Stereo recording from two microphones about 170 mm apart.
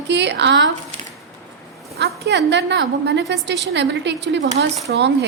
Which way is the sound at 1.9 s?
75° right (ahead or behind).